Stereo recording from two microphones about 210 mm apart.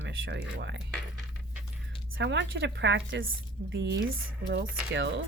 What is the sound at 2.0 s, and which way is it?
A woman's voice, 65° right (ahead or behind).